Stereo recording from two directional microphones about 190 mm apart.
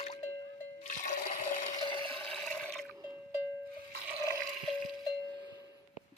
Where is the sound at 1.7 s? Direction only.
25° left (ahead or behind).